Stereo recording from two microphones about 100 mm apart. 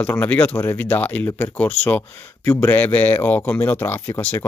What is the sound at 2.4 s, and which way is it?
Speech, 20° left (ahead or behind).